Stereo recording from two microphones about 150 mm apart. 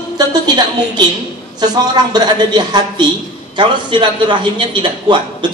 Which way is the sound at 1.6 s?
25° right (ahead or behind).